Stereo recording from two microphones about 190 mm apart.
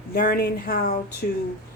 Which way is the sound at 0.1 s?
55° left (ahead or behind).